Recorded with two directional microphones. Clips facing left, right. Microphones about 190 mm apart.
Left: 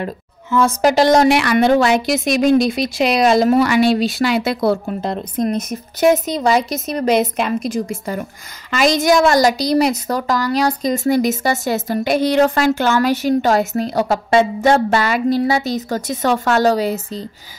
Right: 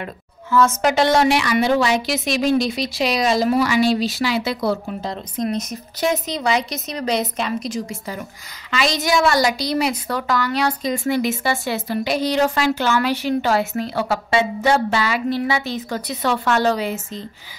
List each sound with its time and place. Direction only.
0.0 s speech: 30° left (ahead or behind)
1.3 s a woman's voice: 55° left (ahead or behind); by 17.3 s 35° left (ahead or behind)